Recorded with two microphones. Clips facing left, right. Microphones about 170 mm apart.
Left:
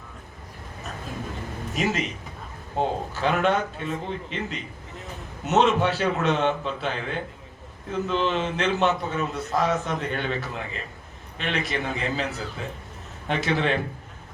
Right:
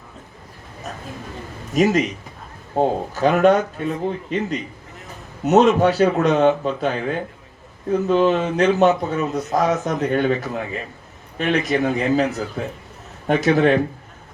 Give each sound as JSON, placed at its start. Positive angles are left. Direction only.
{"t": 1.7, "sound": "speech", "side_deg": -40}